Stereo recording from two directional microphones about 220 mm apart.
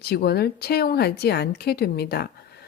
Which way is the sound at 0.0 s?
45° left (ahead or behind).